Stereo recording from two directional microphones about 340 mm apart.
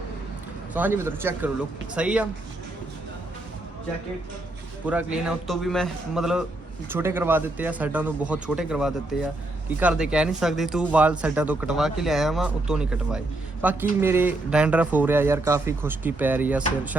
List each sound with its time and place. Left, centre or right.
0.7 s speech: centre
4.9 s speech: centre